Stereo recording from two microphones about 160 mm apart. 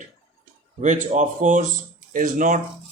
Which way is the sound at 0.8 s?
50° right (ahead or behind).